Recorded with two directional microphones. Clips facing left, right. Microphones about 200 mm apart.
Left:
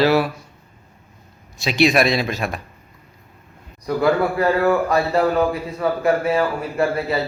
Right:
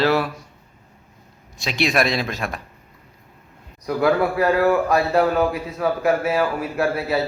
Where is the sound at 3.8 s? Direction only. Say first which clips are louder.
Left 1 dB; centre (ahead or behind).